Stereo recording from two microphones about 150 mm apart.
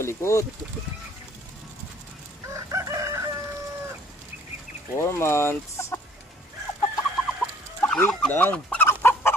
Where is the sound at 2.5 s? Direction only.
20° right (ahead or behind).